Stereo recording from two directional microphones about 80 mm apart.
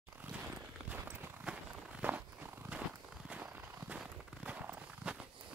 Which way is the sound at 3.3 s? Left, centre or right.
Centre.